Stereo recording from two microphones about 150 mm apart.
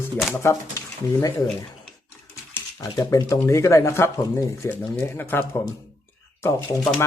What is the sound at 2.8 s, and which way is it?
Speech, 20° left (ahead or behind).